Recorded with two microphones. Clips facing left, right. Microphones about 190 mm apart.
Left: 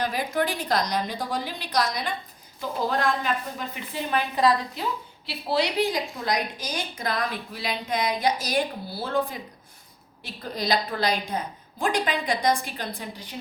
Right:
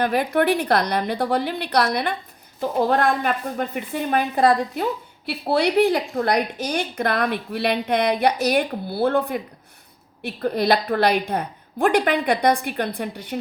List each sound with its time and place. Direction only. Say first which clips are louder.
0.0 s speech: right 6 dB; 60° right (ahead or behind)